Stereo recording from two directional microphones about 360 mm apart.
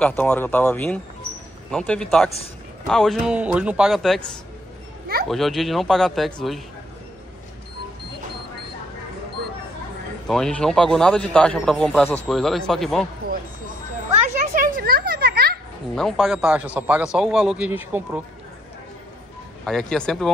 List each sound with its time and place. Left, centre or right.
0.0 s speech: centre
5.3 s speech: centre
10.2 s speech: centre
13.2 s a sound: right
14.5 s a sound: right
15.9 s speech: centre
19.6 s speech: centre